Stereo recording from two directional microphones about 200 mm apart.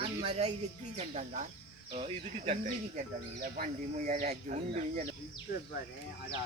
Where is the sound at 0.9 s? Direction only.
35° right (ahead or behind).